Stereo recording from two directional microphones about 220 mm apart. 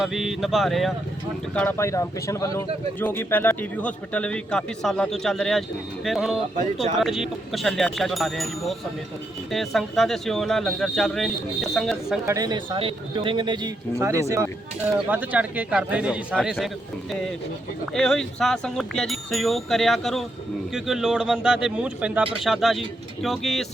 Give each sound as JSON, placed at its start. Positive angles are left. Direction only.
{"t": 0.0, "sound": "speech", "side_deg": 0}
{"t": 1.5, "sound": "speech", "side_deg": 10}
{"t": 12.2, "sound": "speech", "side_deg": -15}
{"t": 17.9, "sound": "speech", "side_deg": 0}